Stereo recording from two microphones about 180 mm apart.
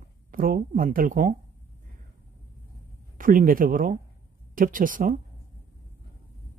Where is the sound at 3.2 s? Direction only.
50° right (ahead or behind).